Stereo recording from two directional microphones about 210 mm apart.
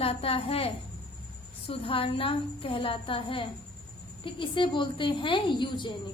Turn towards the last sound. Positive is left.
turn(degrees=20)  # may be behind; listen again after turning